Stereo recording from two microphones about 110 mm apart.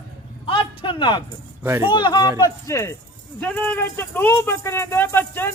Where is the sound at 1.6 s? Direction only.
20° right (ahead or behind).